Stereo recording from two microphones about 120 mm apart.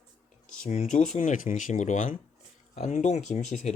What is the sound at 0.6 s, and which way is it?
Speech, 85° left.